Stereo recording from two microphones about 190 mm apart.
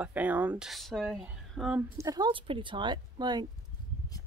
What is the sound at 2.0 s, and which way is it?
A woman's voice, 20° right (ahead or behind).